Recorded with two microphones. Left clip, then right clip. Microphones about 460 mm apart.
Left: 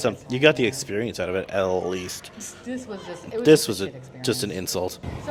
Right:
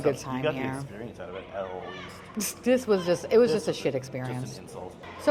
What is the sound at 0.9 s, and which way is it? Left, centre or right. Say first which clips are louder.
Speech: left 13 dB; left.